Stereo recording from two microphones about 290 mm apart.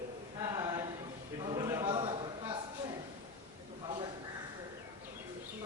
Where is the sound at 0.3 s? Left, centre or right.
Centre.